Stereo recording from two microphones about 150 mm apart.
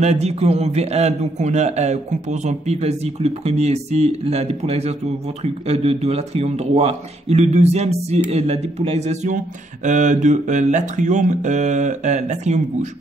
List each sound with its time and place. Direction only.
0.0 s a man's voice: 45° right (ahead or behind)